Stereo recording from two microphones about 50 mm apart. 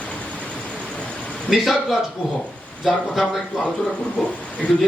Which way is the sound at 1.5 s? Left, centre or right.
Centre.